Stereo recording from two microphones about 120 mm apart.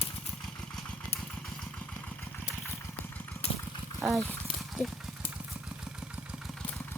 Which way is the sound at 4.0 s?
Centre (ahead or behind).